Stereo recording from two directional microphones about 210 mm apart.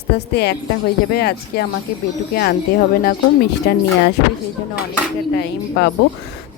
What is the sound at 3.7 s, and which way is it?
Speech, 50° left (ahead or behind).